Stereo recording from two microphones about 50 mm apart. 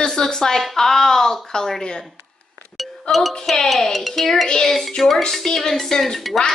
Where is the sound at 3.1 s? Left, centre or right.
Centre.